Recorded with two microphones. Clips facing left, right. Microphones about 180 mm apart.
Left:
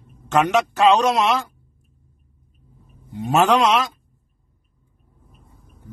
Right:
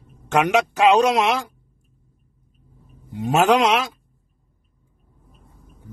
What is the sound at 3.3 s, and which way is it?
Speech, 10° right (ahead or behind).